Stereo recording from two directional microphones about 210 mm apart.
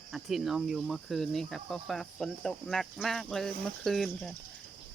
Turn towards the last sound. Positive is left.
turn(degrees=0)  # may be behind; listen again after turning